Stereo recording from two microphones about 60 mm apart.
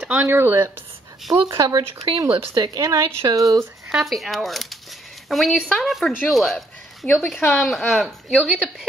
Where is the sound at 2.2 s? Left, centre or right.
Right.